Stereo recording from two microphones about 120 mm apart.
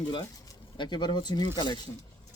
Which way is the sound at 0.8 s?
40° left (ahead or behind).